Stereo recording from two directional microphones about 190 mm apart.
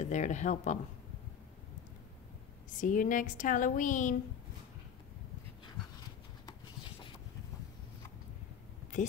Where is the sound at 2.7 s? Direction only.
45° left (ahead or behind).